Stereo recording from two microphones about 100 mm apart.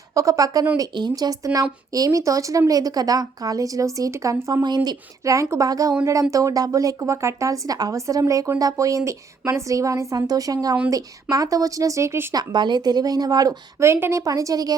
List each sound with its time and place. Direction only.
0.1 s speech: 35° right (ahead or behind)
4.6 s speech: 45° right (ahead or behind); by 12.3 s 25° right (ahead or behind)
12.3 s speech: 45° right (ahead or behind)
13.8 s speech: 25° right (ahead or behind)